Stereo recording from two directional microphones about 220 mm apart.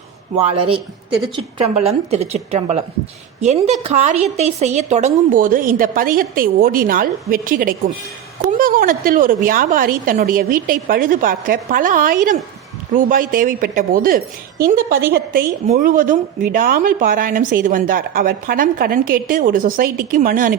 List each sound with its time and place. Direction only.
1.4 s a woman's voice: 25° right (ahead or behind)